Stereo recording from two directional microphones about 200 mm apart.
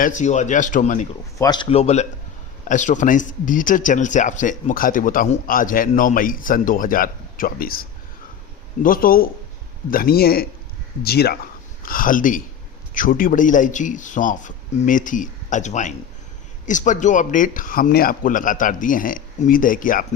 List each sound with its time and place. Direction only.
0.2 s speech: 35° left (ahead or behind)
1.4 s a man's voice: 20° left (ahead or behind); by 20.1 s 45° left (ahead or behind)